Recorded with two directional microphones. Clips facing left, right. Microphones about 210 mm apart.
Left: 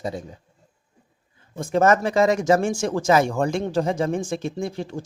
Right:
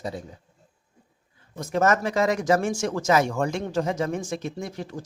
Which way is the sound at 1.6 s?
30° left (ahead or behind).